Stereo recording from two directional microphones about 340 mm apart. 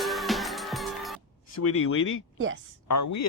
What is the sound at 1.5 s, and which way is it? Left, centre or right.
Speech, left.